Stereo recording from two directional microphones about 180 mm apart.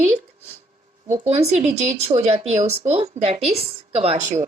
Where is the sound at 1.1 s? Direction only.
40° right (ahead or behind).